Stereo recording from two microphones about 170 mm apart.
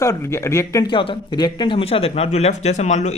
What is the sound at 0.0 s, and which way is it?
Speech, 15° left (ahead or behind).